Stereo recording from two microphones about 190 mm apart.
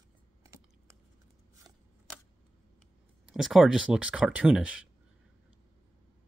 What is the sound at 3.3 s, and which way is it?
Speech, centre (ahead or behind).